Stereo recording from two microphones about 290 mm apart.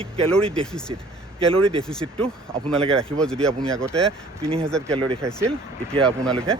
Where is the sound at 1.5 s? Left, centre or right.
Centre.